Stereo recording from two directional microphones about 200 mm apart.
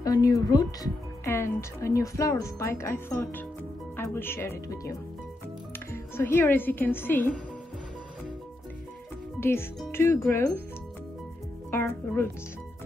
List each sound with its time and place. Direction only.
0.0 s a woman's voice: 20° left (ahead or behind)
9.4 s speech: 10° left (ahead or behind)
11.7 s speech: 10° left (ahead or behind)